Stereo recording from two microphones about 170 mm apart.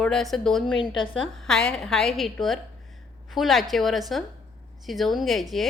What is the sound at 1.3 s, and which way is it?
A woman's voice, 5° left (ahead or behind).